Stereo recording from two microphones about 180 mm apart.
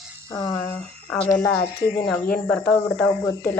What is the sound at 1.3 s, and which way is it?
Speech, 10° left (ahead or behind).